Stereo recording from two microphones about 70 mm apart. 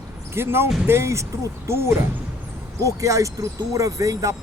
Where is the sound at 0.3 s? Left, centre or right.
Right.